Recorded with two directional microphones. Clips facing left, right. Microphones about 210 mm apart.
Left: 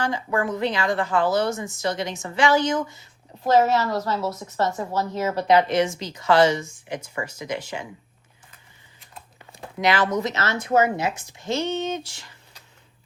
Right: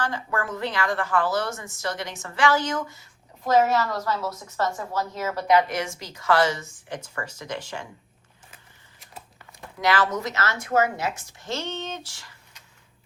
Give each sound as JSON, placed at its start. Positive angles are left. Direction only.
{"t": 0.0, "sound": "speech", "side_deg": 15}
{"t": 9.5, "sound": "speech", "side_deg": 25}